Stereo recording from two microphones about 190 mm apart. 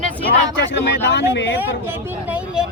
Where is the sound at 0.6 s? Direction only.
65° left (ahead or behind).